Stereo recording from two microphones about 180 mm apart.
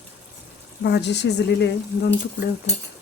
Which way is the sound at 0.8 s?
70° left (ahead or behind).